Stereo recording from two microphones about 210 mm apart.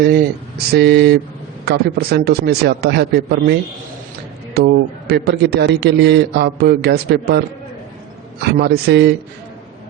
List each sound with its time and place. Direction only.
0.0 s a man's voice: 50° right (ahead or behind)